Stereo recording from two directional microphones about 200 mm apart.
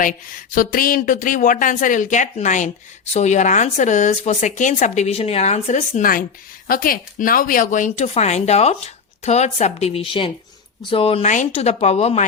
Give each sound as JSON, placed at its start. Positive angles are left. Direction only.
{"t": 0.0, "sound": "speech", "side_deg": 45}